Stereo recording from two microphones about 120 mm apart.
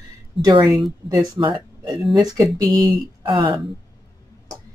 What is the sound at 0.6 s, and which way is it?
Speech, centre (ahead or behind).